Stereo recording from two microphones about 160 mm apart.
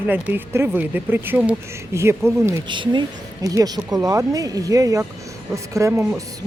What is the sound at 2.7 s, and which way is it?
Speech, 30° right (ahead or behind).